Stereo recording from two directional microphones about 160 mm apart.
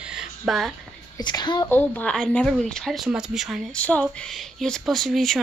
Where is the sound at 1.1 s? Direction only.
25° left (ahead or behind).